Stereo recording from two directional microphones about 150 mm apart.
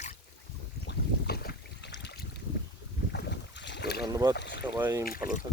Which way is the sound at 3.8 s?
90° left.